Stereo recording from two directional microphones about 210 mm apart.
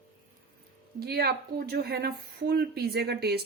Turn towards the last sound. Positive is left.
turn(degrees=-50)  # may be behind; listen again after turning